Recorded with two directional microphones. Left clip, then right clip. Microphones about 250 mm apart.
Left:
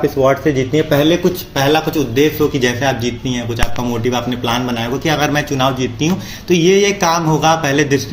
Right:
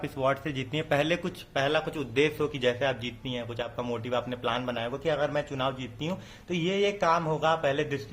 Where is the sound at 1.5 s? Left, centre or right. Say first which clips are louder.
Left 12 dB; centre.